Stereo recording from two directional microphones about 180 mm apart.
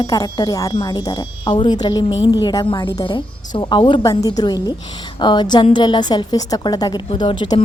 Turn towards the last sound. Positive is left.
turn(degrees=25)  # may be behind; listen again after turning